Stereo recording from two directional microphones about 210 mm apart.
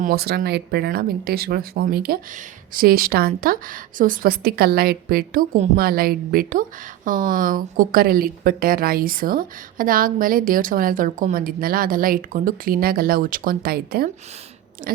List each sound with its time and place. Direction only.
0.0 s speech: 50° right (ahead or behind)
14.8 s biting: 40° right (ahead or behind)